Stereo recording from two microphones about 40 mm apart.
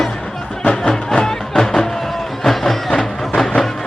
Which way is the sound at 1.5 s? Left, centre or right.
Centre.